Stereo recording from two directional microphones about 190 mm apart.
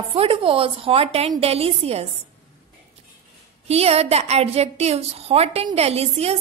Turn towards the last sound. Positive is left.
turn(degrees=-35)  # may be behind; listen again after turning